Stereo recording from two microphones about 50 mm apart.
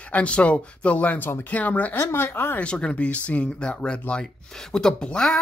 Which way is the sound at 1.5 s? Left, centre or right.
Left.